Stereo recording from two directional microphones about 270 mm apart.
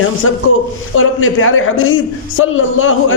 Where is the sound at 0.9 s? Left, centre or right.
Left.